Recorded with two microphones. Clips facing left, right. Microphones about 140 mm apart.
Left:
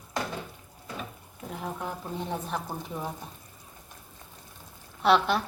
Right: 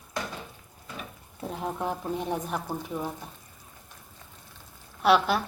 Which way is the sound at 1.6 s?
20° right (ahead or behind).